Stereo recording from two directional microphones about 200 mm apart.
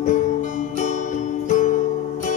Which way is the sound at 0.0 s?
40° left (ahead or behind).